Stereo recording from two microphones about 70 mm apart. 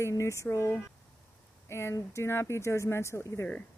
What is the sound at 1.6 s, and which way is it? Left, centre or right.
Speech, left.